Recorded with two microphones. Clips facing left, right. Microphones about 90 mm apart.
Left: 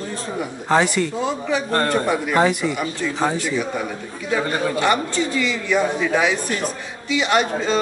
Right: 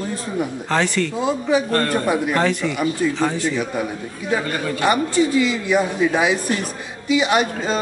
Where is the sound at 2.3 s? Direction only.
15° left (ahead or behind).